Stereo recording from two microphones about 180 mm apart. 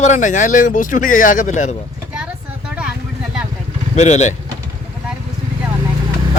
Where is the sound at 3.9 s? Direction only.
40° left (ahead or behind).